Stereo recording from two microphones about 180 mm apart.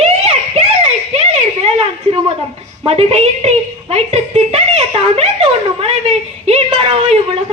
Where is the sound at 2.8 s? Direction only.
35° right (ahead or behind).